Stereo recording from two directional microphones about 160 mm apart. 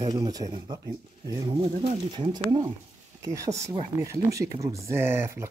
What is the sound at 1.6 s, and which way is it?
Speech, 40° right (ahead or behind).